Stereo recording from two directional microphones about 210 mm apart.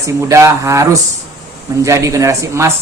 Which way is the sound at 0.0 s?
15° right (ahead or behind).